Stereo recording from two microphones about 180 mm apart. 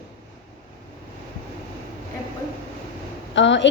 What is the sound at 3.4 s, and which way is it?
Speech, 90° left.